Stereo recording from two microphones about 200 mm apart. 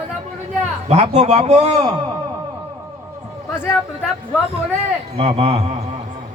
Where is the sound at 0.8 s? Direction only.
35° right (ahead or behind).